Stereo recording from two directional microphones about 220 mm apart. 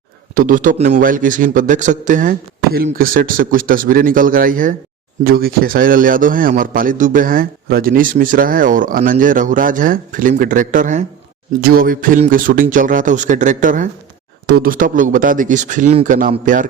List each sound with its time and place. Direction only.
0.3 s a man's voice: 40° right (ahead or behind)